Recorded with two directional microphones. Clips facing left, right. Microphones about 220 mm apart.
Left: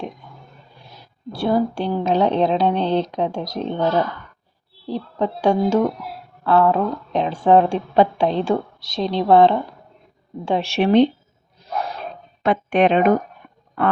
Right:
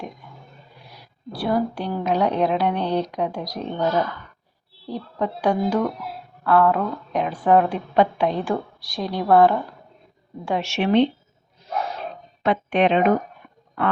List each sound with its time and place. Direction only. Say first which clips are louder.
0.9 s a sound: left 3 dB; 25° left (ahead or behind)
1.9 s a woman's voice: left 3 dB; 25° left (ahead or behind)
12.4 s speech: left 2 dB; 45° left (ahead or behind)